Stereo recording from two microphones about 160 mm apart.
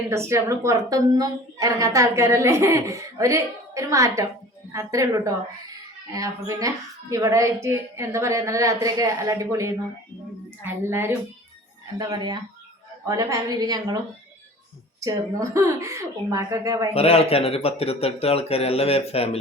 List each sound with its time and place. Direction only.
0.1 s a woman's voice: 15° right (ahead or behind)
11.9 s a woman's voice: 25° right (ahead or behind)
15.0 s a woman's voice: 20° right (ahead or behind)
16.9 s speech: 40° left (ahead or behind)